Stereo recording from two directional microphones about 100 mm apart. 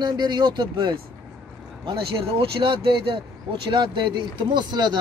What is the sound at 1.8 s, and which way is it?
Speech, 60° right (ahead or behind).